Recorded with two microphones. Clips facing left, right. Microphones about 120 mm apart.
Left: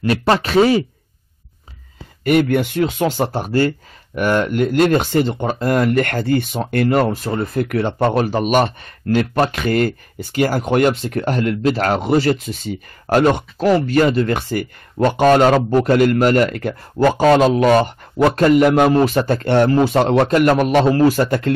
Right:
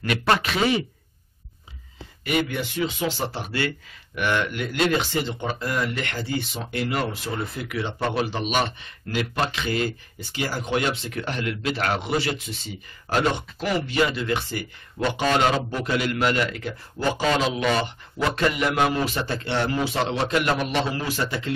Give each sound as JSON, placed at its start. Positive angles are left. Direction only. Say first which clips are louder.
{"t": 0.0, "sound": "speech", "louder": "left 6 dB", "side_deg": 35}
{"t": 2.2, "sound": "speech", "louder": "left 10 dB", "side_deg": 55}